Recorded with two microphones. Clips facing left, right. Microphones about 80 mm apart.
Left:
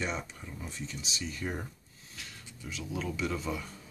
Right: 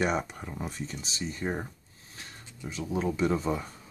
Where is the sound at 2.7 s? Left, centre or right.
Right.